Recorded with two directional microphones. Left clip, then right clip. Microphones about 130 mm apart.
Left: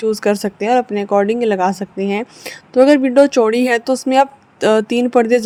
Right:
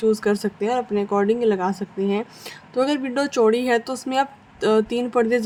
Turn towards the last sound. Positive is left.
turn(degrees=50)  # may be behind; listen again after turning